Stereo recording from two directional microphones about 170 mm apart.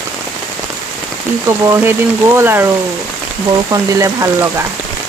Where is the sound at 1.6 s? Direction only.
15° right (ahead or behind).